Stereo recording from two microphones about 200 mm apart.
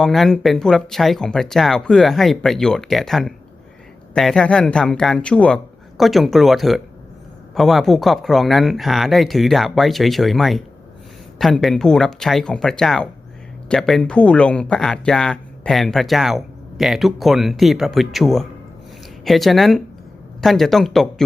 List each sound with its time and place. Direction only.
0.0 s speech: centre (ahead or behind)